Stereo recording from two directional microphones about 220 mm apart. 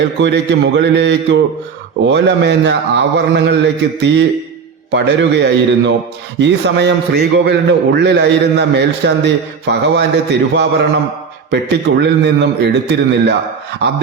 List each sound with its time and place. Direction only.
0.2 s a man's voice: 55° right (ahead or behind)